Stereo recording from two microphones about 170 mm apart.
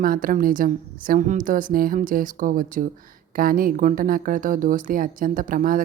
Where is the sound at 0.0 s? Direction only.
55° right (ahead or behind).